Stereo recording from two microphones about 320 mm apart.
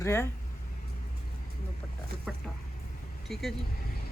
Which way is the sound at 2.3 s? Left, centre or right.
Centre.